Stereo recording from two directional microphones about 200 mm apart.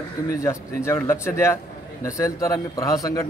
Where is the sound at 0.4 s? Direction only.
15° left (ahead or behind).